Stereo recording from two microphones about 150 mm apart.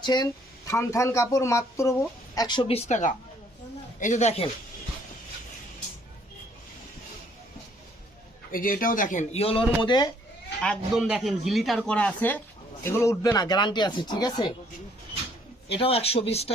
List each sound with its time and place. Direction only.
0.0 s speech: 30° left (ahead or behind); by 4.4 s 50° left (ahead or behind)
8.5 s speech: 70° left (ahead or behind); by 9.6 s 40° left (ahead or behind)
9.8 s speech: 30° left (ahead or behind)
10.6 s speech: centre (ahead or behind); by 14.5 s 25° left (ahead or behind)
15.7 s speech: 40° left (ahead or behind)